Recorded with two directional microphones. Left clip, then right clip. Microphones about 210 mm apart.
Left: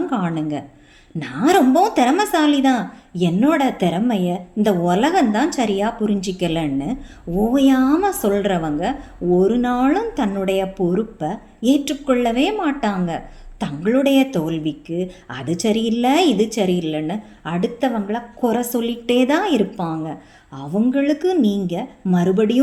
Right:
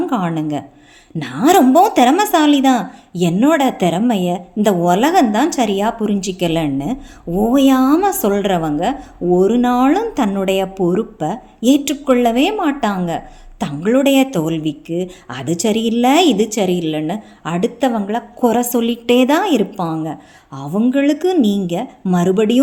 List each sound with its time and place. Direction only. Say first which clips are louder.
0.1 s a woman's voice: right 4 dB; 25° right (ahead or behind)